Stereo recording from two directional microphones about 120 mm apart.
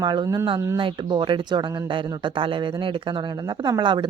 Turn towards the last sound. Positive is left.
turn(degrees=-40)  # may be behind; listen again after turning